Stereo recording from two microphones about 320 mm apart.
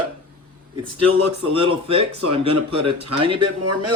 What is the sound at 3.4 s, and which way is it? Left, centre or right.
Speech, right.